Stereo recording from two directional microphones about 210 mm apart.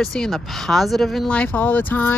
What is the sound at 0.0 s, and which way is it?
Speech, centre (ahead or behind).